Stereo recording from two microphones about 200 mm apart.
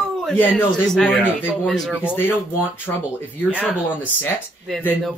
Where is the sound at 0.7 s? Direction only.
Centre (ahead or behind).